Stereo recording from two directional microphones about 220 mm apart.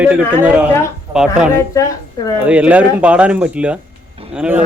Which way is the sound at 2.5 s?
5° right (ahead or behind).